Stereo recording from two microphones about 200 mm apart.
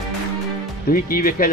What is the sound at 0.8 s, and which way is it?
Speech, 45° left (ahead or behind).